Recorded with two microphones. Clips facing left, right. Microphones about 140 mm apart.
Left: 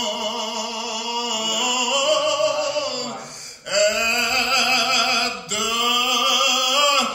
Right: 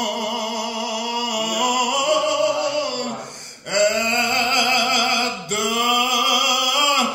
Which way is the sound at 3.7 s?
50° right (ahead or behind).